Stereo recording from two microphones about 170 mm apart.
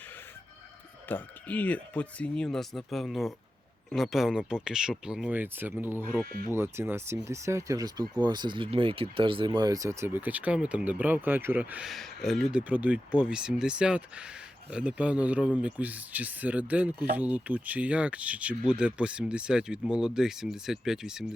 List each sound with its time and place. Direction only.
1.0 s speech: 10° left (ahead or behind)